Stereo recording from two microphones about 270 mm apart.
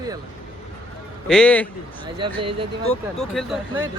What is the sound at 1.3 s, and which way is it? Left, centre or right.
Speech, centre.